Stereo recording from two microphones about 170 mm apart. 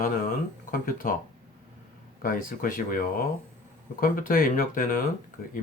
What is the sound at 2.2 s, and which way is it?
Speech, 55° left (ahead or behind).